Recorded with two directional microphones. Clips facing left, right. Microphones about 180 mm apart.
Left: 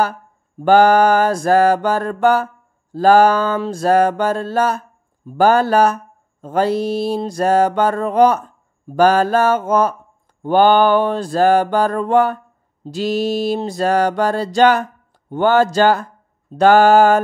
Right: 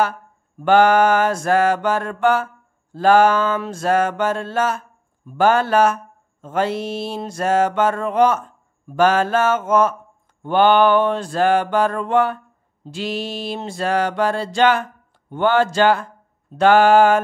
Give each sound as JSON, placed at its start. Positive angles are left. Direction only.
{"t": 0.6, "sound": "mantra", "side_deg": 35}